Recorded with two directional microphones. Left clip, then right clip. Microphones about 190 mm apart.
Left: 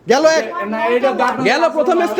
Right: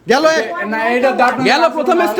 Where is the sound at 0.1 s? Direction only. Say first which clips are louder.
Even; 10° right (ahead or behind).